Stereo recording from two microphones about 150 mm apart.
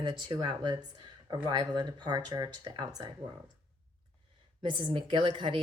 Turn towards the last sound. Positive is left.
turn(degrees=-35)  # may be behind; listen again after turning